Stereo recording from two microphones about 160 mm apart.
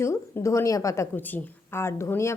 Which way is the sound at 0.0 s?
15° left (ahead or behind).